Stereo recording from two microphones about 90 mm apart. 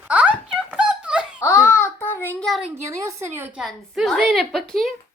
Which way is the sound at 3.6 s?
Centre (ahead or behind).